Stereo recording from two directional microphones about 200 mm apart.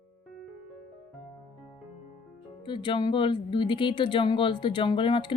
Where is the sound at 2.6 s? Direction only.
25° left (ahead or behind).